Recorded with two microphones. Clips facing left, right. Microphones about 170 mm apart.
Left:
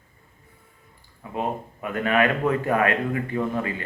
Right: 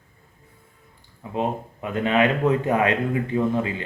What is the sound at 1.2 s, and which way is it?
Speech, 20° right (ahead or behind).